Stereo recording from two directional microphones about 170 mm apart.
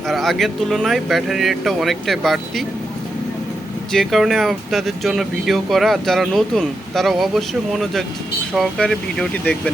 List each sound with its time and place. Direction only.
0.1 s speech: centre (ahead or behind)
3.9 s speech: centre (ahead or behind)